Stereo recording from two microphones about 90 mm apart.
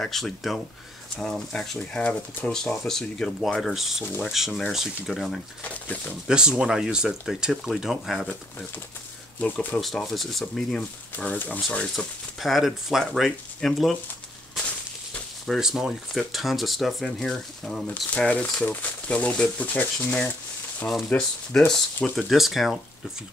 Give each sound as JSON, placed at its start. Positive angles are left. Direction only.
{"t": 0.0, "sound": "speech", "side_deg": 5}
{"t": 5.6, "sound": "speech", "side_deg": 15}
{"t": 6.2, "sound": "speech", "side_deg": -10}
{"t": 9.4, "sound": "speech", "side_deg": 15}
{"t": 9.8, "sound": "speech", "side_deg": 0}
{"t": 15.4, "sound": "speech", "side_deg": 0}
{"t": 18.1, "sound": "speech", "side_deg": 15}
{"t": 21.2, "sound": "speech", "side_deg": 5}